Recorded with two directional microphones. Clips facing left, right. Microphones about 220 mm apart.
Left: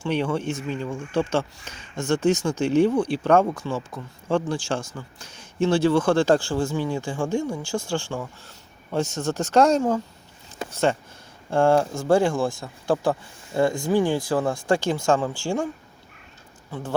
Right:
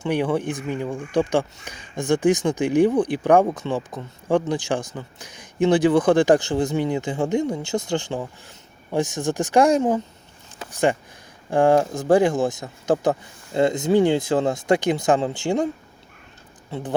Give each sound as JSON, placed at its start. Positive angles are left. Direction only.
{"t": 0.0, "sound": "speech", "side_deg": -15}
{"t": 11.5, "sound": "speech", "side_deg": -15}
{"t": 16.7, "sound": "speech", "side_deg": -25}